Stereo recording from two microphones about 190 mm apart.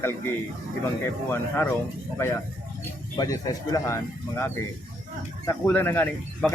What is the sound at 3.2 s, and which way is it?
Speech, 20° left (ahead or behind).